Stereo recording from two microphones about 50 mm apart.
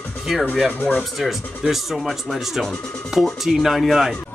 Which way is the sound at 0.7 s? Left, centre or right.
Left.